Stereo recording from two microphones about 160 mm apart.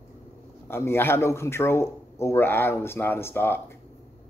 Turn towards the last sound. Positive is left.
turn(degrees=15)  # may be behind; listen again after turning